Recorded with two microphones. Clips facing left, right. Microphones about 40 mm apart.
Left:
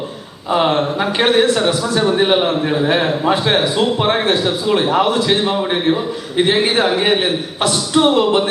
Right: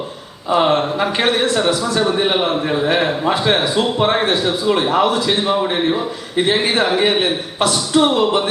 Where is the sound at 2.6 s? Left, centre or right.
Centre.